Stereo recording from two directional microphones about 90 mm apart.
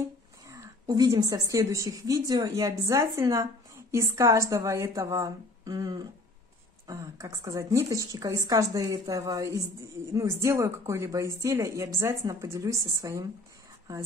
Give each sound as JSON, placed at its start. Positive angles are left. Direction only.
{"t": 0.5, "sound": "a woman's voice", "side_deg": -40}